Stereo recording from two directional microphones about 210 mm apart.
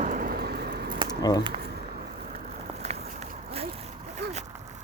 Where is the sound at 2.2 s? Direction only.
30° right (ahead or behind).